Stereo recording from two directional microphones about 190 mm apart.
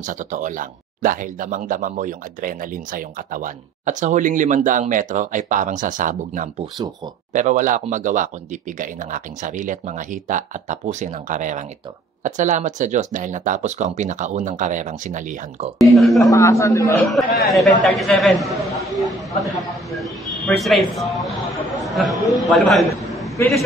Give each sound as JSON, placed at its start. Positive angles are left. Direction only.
{"t": 0.0, "sound": "speech", "side_deg": -40}
{"t": 15.8, "sound": "a man's voice", "side_deg": 0}
{"t": 16.2, "sound": "speech", "side_deg": 15}
{"t": 17.0, "sound": "a man's voice", "side_deg": 0}
{"t": 18.9, "sound": "a sound", "side_deg": 0}
{"t": 22.3, "sound": "a man's voice", "side_deg": 0}